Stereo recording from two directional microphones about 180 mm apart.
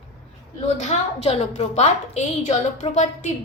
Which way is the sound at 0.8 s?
35° left (ahead or behind).